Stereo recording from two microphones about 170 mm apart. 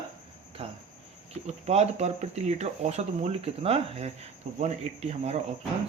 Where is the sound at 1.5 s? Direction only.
40° right (ahead or behind).